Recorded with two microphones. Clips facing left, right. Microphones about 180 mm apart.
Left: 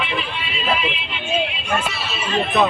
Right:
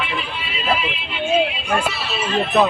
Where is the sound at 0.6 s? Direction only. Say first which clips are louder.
Right 1 dB; 5° right (ahead or behind).